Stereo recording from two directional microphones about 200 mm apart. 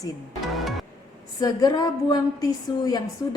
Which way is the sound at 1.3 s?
20° left (ahead or behind).